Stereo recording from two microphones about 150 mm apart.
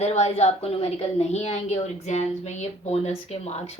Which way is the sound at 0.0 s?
45° left (ahead or behind).